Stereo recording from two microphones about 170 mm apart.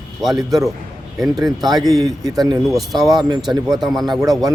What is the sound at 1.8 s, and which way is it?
Speech, 20° right (ahead or behind).